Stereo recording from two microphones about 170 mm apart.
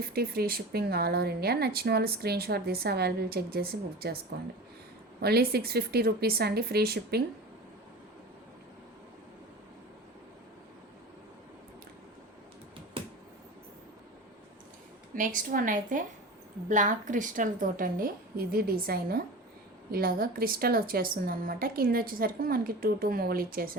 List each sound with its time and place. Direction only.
0.0 s speech: 65° right (ahead or behind)
5.2 s speech: 65° right (ahead or behind)
15.1 s a woman's voice: 55° right (ahead or behind)